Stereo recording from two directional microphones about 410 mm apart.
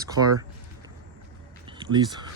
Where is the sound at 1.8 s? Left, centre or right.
Centre.